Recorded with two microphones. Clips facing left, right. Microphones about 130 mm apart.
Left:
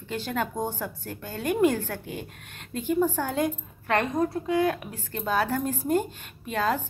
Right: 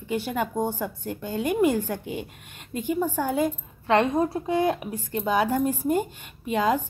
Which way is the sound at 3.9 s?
30° right (ahead or behind).